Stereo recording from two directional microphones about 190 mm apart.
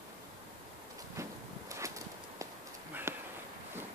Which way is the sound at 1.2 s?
15° right (ahead or behind).